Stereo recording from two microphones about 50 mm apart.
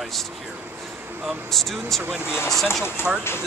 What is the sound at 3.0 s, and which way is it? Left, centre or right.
Speech, left.